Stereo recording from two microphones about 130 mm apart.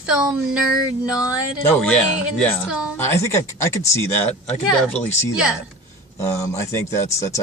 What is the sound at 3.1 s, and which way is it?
Speech, 20° left (ahead or behind).